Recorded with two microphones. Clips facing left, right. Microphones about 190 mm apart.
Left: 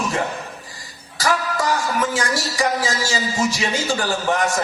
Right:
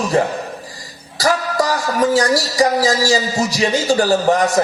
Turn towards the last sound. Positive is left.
turn(degrees=-40)  # may be behind; listen again after turning